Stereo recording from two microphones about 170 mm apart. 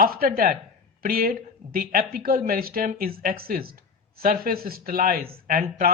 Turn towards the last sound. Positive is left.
turn(degrees=-55)  # may be behind; listen again after turning